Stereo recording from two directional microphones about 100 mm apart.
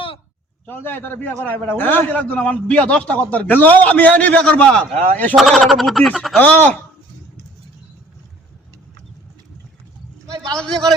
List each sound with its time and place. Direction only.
0.6 s a man's voice: 20° left (ahead or behind)
5.4 s a man's voice: centre (ahead or behind); by 6.7 s 15° left (ahead or behind)